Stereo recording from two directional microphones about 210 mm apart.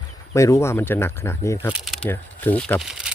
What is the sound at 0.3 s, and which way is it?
Speech, 15° left (ahead or behind).